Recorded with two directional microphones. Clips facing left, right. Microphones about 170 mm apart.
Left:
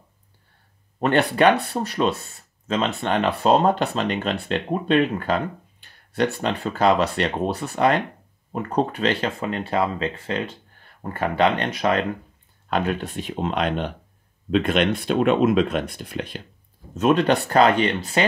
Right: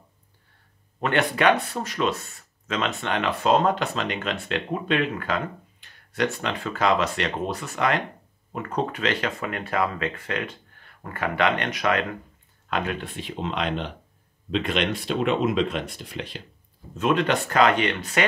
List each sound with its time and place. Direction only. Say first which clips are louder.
1.0 s speech: left 4 dB; 35° left (ahead or behind); by 16.4 s 50° left (ahead or behind)
16.9 s speech: left 4 dB; 40° left (ahead or behind)